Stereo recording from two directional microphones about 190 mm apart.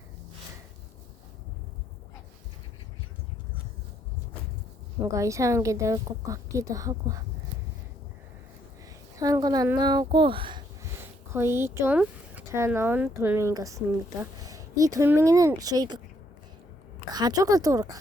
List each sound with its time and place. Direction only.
5.1 s speech: 15° right (ahead or behind)
9.1 s a woman's voice: 20° right (ahead or behind)
11.3 s speech: 15° right (ahead or behind)
17.1 s a woman's voice: 20° right (ahead or behind)